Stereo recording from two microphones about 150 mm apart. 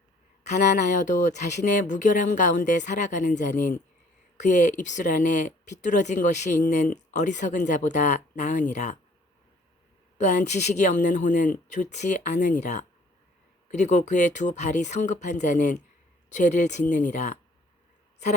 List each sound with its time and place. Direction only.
0.4 s speech: 55° left (ahead or behind)
10.2 s speech: 50° left (ahead or behind)